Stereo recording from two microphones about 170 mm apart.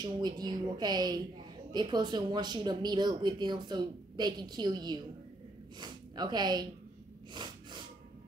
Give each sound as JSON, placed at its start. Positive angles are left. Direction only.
{"t": 0.0, "sound": "speech", "side_deg": -25}
{"t": 7.3, "sound": "snort", "side_deg": -25}